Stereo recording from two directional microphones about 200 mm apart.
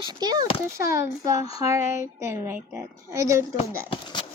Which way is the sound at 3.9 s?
25° left (ahead or behind).